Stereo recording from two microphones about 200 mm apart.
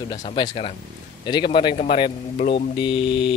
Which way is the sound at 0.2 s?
30° left (ahead or behind).